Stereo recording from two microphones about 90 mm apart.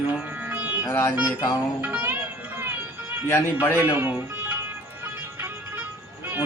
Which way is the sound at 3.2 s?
30° left (ahead or behind).